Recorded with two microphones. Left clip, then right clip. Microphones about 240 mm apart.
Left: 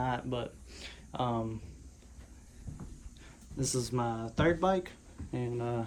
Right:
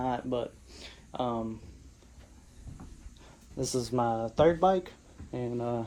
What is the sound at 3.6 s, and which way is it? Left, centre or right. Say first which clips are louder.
Speech: right 4 dB; centre.